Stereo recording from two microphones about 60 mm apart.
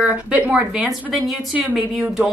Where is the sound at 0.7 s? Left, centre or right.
Centre.